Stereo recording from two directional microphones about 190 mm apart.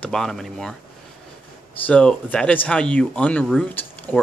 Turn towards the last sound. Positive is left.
turn(degrees=5)  # may be behind; listen again after turning